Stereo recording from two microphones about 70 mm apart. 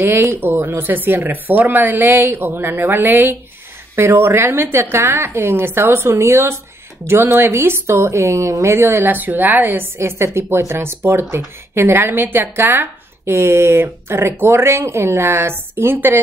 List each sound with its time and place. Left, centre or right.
0.0 s speech: right